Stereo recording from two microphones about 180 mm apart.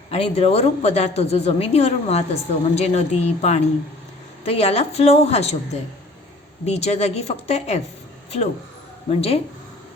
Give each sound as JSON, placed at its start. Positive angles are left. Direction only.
{"t": 0.1, "sound": "a woman's voice", "side_deg": 35}
{"t": 6.7, "sound": "a woman's voice", "side_deg": 35}
{"t": 9.0, "sound": "a woman's voice", "side_deg": 35}